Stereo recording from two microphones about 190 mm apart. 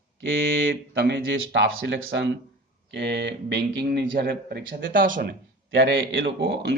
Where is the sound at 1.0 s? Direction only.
70° right (ahead or behind); by 5.4 s 45° right (ahead or behind).